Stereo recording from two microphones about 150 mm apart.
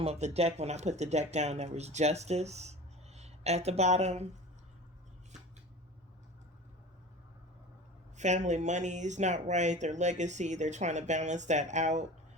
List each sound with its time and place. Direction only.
0.0 s speech: 45° right (ahead or behind)
8.1 s speech: 50° right (ahead or behind)